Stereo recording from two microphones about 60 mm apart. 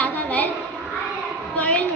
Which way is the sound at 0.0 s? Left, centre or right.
Left.